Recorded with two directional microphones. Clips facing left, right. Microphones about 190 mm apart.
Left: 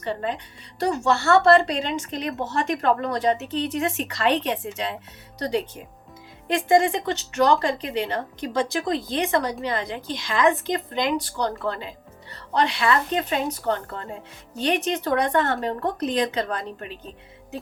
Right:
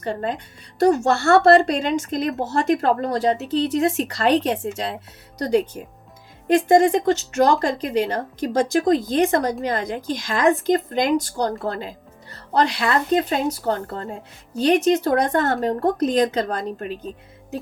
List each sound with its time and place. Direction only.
0.0 s a woman's voice: 40° right (ahead or behind)